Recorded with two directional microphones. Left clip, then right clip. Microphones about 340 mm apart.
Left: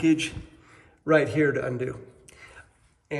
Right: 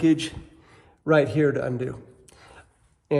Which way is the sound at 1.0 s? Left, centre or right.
Right.